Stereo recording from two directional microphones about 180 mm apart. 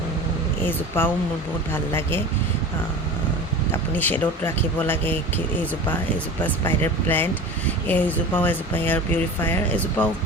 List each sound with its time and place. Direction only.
0.6 s speech: 10° left (ahead or behind)
3.7 s speech: 10° left (ahead or behind)
6.4 s speech: 10° left (ahead or behind)